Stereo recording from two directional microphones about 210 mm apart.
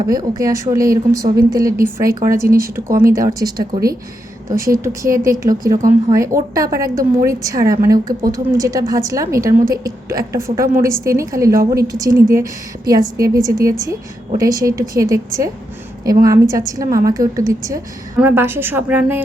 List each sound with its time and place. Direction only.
0.0 s a woman's voice: 15° right (ahead or behind)